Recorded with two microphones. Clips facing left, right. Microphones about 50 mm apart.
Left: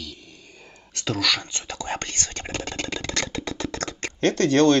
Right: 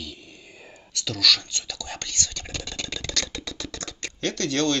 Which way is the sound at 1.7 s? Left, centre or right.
Left.